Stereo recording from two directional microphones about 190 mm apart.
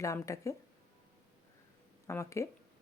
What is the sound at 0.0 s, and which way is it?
Speech, 15° left (ahead or behind).